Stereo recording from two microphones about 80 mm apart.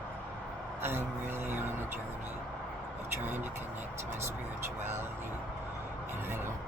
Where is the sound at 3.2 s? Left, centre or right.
Right.